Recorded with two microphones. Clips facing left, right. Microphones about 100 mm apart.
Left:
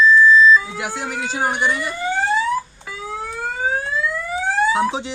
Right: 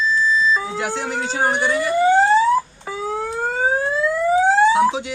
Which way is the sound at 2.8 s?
35° right (ahead or behind).